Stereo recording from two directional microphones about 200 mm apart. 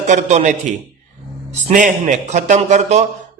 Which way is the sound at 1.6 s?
35° right (ahead or behind).